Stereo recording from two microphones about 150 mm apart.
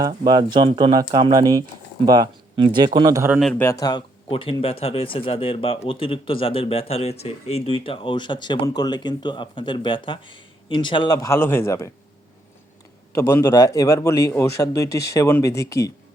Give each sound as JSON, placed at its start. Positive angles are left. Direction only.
{"t": 0.3, "sound": "speech", "side_deg": -30}
{"t": 3.5, "sound": "speech", "side_deg": 15}
{"t": 13.1, "sound": "a man's voice", "side_deg": 20}